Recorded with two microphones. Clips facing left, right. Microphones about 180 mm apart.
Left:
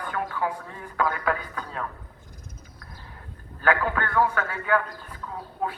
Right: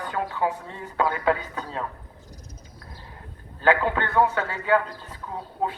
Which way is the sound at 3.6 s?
25° right (ahead or behind).